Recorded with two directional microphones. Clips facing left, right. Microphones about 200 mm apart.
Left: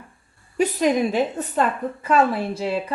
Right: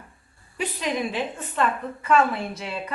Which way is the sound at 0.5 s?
45° left (ahead or behind).